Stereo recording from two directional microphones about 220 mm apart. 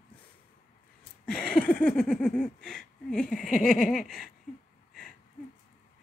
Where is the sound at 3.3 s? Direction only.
35° left (ahead or behind).